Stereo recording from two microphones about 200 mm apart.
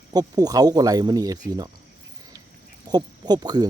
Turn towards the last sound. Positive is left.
turn(degrees=-20)  # may be behind; listen again after turning